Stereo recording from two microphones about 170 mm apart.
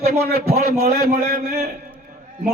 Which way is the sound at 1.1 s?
70° right (ahead or behind).